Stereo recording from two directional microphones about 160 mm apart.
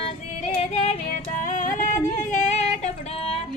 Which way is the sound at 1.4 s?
55° left (ahead or behind).